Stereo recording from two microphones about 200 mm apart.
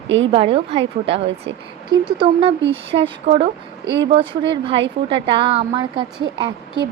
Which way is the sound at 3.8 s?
60° right (ahead or behind).